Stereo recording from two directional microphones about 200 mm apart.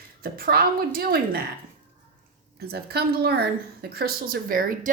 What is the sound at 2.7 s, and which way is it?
A woman's voice, 50° right (ahead or behind).